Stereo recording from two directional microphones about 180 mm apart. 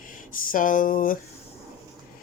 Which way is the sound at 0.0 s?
50° left (ahead or behind).